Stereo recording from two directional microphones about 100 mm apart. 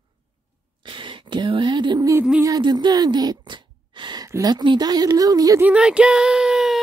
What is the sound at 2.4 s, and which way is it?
A woman's voice, 40° right (ahead or behind).